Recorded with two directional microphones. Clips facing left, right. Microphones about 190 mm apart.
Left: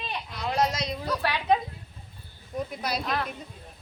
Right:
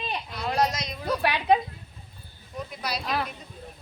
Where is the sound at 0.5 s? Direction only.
30° left (ahead or behind).